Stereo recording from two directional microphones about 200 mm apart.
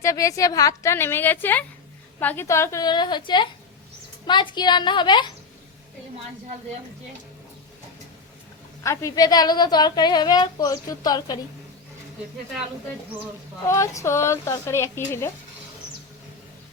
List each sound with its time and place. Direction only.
0.0 s a woman's voice: 15° left (ahead or behind)
8.8 s a woman's voice: 15° left (ahead or behind)
13.7 s a woman's voice: 15° left (ahead or behind)